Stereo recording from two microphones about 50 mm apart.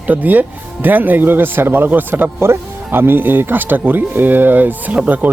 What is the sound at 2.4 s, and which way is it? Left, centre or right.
Speech, right.